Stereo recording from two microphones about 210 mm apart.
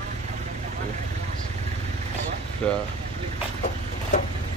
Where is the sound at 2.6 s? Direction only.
5° left (ahead or behind).